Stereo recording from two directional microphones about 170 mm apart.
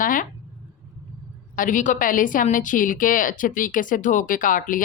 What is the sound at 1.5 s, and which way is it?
Speech, 50° left (ahead or behind).